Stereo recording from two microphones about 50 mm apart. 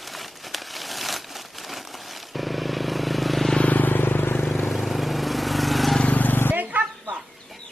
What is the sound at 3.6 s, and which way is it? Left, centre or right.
Vehicle, left.